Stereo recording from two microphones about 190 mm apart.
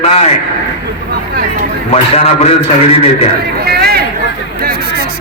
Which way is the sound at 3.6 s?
55° right (ahead or behind).